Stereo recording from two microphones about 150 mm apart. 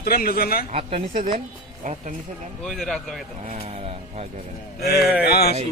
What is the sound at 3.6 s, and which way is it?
Speech, 40° right (ahead or behind).